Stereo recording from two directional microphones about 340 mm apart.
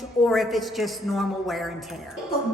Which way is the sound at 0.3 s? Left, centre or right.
Centre.